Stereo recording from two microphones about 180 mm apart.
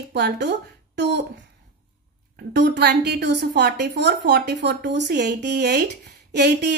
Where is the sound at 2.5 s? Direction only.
70° right (ahead or behind).